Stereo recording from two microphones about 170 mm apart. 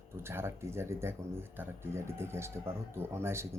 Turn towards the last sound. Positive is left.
turn(degrees=-15)  # may be behind; listen again after turning